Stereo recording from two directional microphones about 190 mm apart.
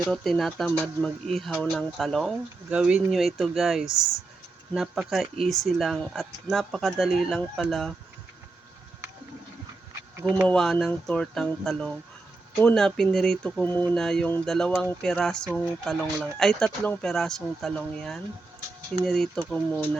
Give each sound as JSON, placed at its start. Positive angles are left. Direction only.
{"t": 0.1, "sound": "speech", "side_deg": 0}
{"t": 3.8, "sound": "speech", "side_deg": 15}
{"t": 4.7, "sound": "speech", "side_deg": 0}
{"t": 10.4, "sound": "speech", "side_deg": 0}